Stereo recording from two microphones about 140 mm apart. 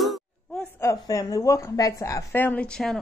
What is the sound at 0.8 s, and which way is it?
A woman's voice, 25° left (ahead or behind).